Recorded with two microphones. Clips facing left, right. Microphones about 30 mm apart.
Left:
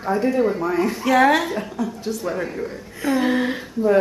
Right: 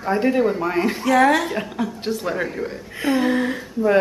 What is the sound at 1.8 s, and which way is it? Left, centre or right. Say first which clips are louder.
Speech: right 1 dB; right.